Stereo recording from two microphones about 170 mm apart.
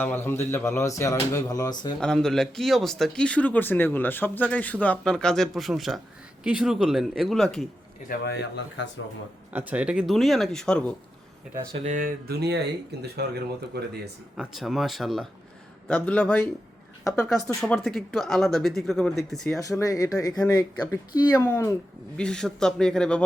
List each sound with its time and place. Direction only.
0.0 s speech: 10° left (ahead or behind)
2.0 s speech: 5° left (ahead or behind)
8.0 s speech: 70° left (ahead or behind)
9.5 s speech: 10° right (ahead or behind)
11.9 s speech: 55° right (ahead or behind); by 13.9 s 70° right (ahead or behind)
14.3 s speech: centre (ahead or behind)
17.0 s a woman's voice: 20° left (ahead or behind)
17.6 s speech: centre (ahead or behind)
19.8 s speech: 20° left (ahead or behind)
21.3 s speech: 15° left (ahead or behind)